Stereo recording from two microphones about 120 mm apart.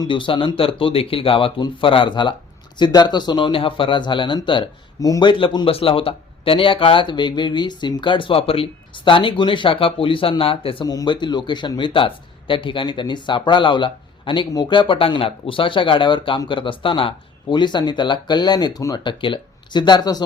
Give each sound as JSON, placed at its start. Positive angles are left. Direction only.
{"t": 0.0, "sound": "speech", "side_deg": 45}
{"t": 4.9, "sound": "speech", "side_deg": 30}
{"t": 5.3, "sound": "speech", "side_deg": 45}
{"t": 10.8, "sound": "speech", "side_deg": 35}
{"t": 19.0, "sound": "speech", "side_deg": 40}